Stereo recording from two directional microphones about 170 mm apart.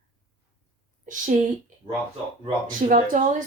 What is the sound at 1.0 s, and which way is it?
Speech, 50° right (ahead or behind).